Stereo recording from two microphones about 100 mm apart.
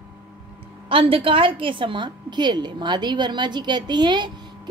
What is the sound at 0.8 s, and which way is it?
A woman's voice, 65° right (ahead or behind).